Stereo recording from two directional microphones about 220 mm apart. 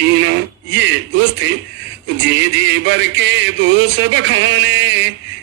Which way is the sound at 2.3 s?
55° right (ahead or behind).